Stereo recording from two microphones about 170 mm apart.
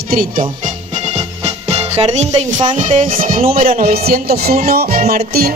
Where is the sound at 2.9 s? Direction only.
50° right (ahead or behind).